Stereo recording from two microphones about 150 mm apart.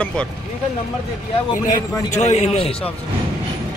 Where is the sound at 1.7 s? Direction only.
50° left (ahead or behind).